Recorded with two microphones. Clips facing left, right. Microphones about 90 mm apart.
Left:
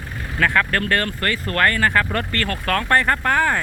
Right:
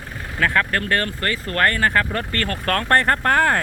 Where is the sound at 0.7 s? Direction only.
25° right (ahead or behind).